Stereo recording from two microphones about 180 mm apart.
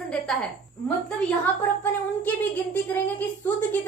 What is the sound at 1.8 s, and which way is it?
Speech, 10° left (ahead or behind).